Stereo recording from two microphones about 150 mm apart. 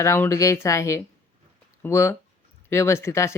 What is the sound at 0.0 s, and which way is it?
Speech, 20° left (ahead or behind).